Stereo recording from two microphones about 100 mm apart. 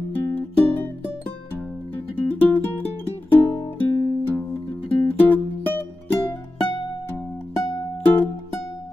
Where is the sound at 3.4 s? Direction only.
40° left (ahead or behind).